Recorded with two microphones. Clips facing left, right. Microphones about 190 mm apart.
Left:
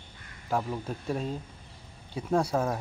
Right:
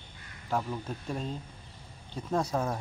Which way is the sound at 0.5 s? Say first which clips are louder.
Left 2 dB; 5° left (ahead or behind).